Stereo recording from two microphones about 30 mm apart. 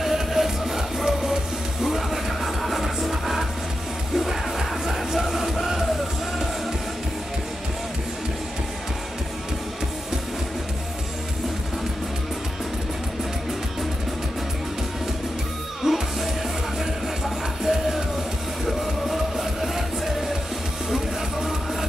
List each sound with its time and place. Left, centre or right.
0.0 s music: centre
15.8 s music: centre
17.6 s music: centre
18.7 s music: centre
20.9 s music: centre